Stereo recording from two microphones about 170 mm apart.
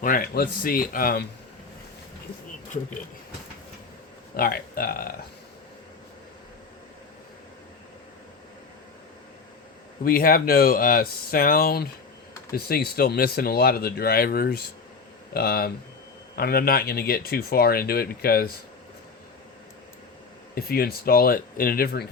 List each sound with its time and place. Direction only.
0.0 s speech: 55° left (ahead or behind)
4.4 s speech: 60° left (ahead or behind)
10.0 s speech: 60° left (ahead or behind)
20.6 s speech: 65° left (ahead or behind)